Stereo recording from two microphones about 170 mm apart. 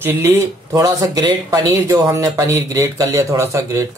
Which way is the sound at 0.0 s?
10° right (ahead or behind).